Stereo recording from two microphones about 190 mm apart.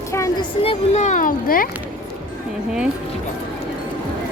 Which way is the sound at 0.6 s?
35° left (ahead or behind).